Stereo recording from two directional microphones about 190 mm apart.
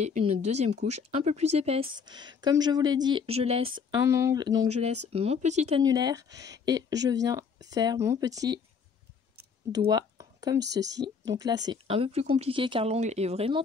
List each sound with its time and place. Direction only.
0.0 s speech: 35° right (ahead or behind)
4.0 s speech: 15° right (ahead or behind)
4.6 s speech: 35° right (ahead or behind)
5.8 s speech: 20° right (ahead or behind)
9.7 s a sound: 20° right (ahead or behind)
10.7 s speech: 20° right (ahead or behind)